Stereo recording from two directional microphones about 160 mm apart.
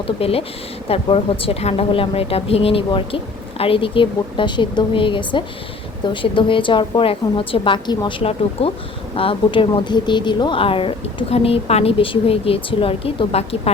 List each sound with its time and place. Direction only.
0.2 s speech: 35° left (ahead or behind)